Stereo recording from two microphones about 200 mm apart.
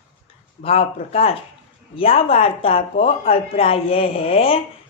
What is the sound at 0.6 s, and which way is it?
Speech, 30° left (ahead or behind).